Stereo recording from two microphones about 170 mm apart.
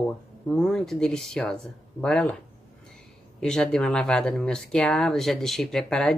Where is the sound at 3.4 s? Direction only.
5° left (ahead or behind).